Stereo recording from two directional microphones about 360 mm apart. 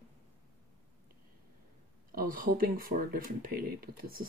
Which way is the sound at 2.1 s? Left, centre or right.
Right.